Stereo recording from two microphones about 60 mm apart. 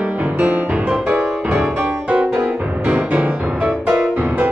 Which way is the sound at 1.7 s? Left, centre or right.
Right.